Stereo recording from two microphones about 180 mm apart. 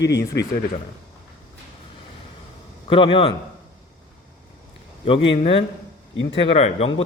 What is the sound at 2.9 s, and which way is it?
Speech, 30° left (ahead or behind).